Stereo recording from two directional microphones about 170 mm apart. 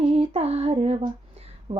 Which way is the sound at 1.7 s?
35° right (ahead or behind).